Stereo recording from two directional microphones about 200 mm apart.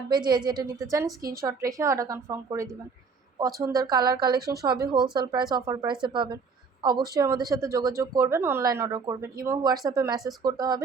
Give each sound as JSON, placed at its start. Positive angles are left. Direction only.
{"t": 0.1, "sound": "a woman's voice", "side_deg": -20}
{"t": 4.4, "sound": "speech", "side_deg": -50}
{"t": 4.6, "sound": "a woman's voice", "side_deg": -20}